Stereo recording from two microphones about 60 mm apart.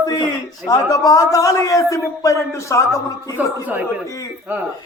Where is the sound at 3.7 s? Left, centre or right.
Right.